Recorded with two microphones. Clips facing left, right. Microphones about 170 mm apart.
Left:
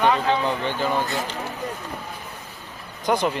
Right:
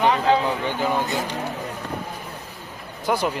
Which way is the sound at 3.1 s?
5° right (ahead or behind).